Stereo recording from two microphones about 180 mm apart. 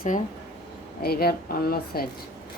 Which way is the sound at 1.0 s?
60° left (ahead or behind).